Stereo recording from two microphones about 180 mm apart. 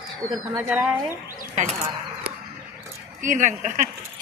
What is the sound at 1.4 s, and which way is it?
Speech, 40° right (ahead or behind).